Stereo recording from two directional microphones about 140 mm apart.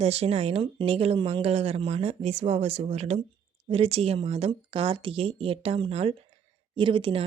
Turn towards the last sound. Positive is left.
turn(degrees=-40)  # may be behind; listen again after turning